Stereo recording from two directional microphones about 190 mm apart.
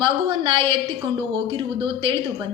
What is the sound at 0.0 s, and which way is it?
A woman's voice, 25° right (ahead or behind).